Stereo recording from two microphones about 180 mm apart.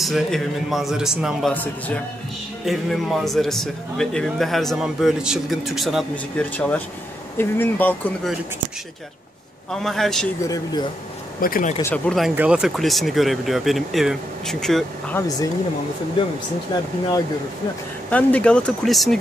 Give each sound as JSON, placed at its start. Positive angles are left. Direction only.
{"t": 0.0, "sound": "speech", "side_deg": 0}
{"t": 1.5, "sound": "speech", "side_deg": 10}
{"t": 2.6, "sound": "speech", "side_deg": 0}
{"t": 9.7, "sound": "speech", "side_deg": 0}
{"t": 10.4, "sound": "speech", "side_deg": 20}
{"t": 11.4, "sound": "speech", "side_deg": 50}
{"t": 11.8, "sound": "speech", "side_deg": 5}
{"t": 12.4, "sound": "speech", "side_deg": -5}
{"t": 16.7, "sound": "speech", "side_deg": 25}
{"t": 18.1, "sound": "speech", "side_deg": 5}